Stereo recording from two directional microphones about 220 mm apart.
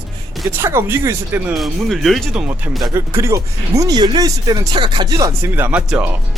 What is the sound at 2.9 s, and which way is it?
Speech, 10° right (ahead or behind).